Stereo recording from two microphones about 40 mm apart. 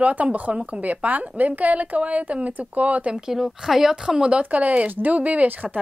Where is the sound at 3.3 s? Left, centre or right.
Centre.